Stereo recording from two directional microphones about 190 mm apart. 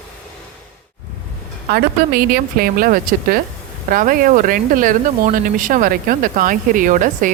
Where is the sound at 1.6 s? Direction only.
50° right (ahead or behind).